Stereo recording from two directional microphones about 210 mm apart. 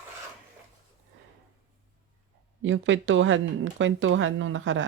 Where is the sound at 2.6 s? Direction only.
65° right (ahead or behind).